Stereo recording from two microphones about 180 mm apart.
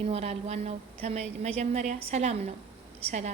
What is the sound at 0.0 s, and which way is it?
A woman's voice, 35° right (ahead or behind).